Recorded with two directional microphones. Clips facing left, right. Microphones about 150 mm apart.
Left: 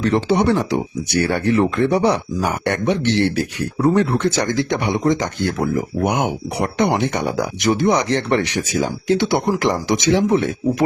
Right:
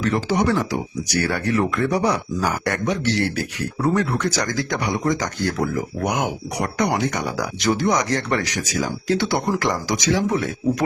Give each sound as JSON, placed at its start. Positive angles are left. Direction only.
{"t": 0.0, "sound": "speech", "side_deg": 30}